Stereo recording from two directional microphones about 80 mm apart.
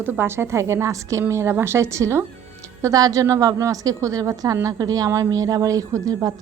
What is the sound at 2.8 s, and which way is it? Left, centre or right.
A woman's voice, right.